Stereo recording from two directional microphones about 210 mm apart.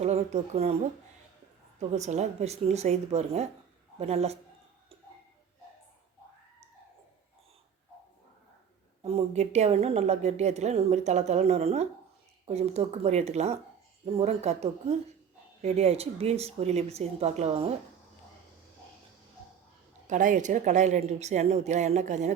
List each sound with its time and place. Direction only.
0.0 s speech: 30° right (ahead or behind)
1.9 s speech: 35° right (ahead or behind)
9.0 s speech: 30° right (ahead or behind)
20.1 s speech: 40° right (ahead or behind)